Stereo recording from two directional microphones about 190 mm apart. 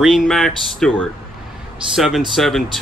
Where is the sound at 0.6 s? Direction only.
5° left (ahead or behind).